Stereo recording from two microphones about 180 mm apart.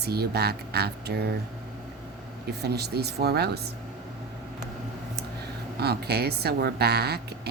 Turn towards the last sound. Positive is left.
turn(degrees=-65)  # may be behind; listen again after turning